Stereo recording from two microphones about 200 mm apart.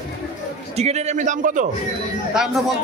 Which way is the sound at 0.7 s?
35° right (ahead or behind).